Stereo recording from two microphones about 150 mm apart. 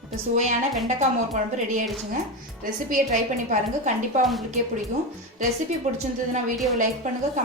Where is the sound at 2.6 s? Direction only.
65° right (ahead or behind).